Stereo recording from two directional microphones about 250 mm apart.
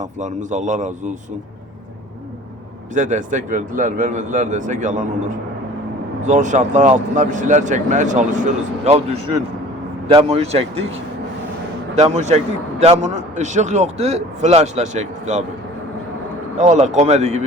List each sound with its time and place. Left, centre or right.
0.0 s speech: right
2.9 s speech: right
6.2 s speech: right
11.9 s speech: right
16.6 s speech: right